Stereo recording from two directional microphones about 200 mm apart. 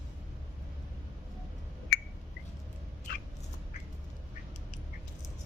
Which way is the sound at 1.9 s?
50° left (ahead or behind).